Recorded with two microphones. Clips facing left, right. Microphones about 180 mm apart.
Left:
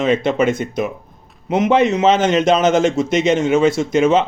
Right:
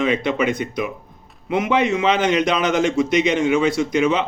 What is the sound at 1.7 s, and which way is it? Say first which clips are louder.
A man's voice: left 5 dB; 45° left (ahead or behind).